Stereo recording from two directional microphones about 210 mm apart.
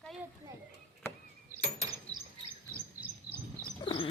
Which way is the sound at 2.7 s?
10° right (ahead or behind).